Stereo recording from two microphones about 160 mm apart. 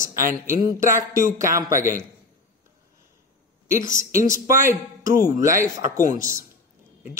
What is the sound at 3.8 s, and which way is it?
Speech, 55° left (ahead or behind).